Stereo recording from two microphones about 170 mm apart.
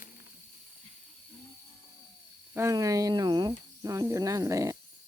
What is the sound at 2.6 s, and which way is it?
Speech, 15° right (ahead or behind).